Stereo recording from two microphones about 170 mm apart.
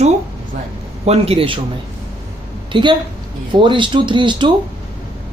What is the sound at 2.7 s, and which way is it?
Speech, 30° right (ahead or behind).